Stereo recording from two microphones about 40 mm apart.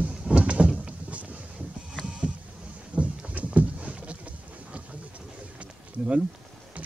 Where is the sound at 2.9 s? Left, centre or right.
Right.